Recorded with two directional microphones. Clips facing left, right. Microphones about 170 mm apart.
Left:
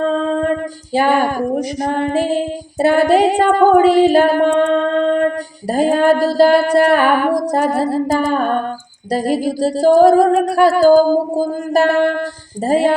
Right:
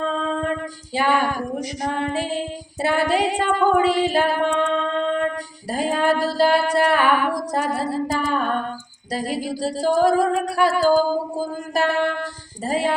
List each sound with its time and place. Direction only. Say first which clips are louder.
0.9 s female singing: left 6 dB; 45° left (ahead or behind)